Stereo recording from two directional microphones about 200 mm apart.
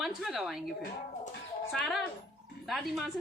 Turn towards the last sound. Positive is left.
turn(degrees=0)  # may be behind; listen again after turning